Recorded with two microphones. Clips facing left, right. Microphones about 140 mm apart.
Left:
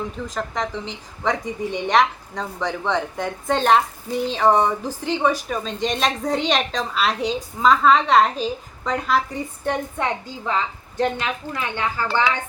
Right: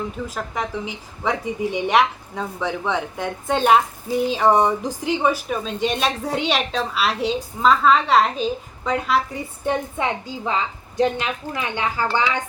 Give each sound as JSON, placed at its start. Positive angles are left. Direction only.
{"t": 0.3, "sound": "a woman's voice", "side_deg": -10}